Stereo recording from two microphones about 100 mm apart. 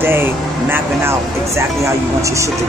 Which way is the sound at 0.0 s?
25° right (ahead or behind).